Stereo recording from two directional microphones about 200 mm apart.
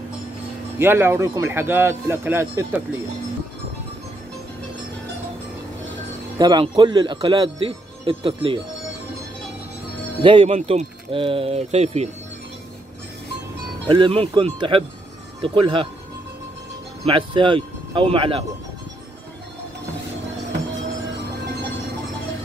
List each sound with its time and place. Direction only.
0.7 s speech: 10° right (ahead or behind)
6.3 s speech: 20° right (ahead or behind)
10.2 s speech: 25° right (ahead or behind)
13.8 s speech: 25° right (ahead or behind)
17.0 s speech: 25° right (ahead or behind)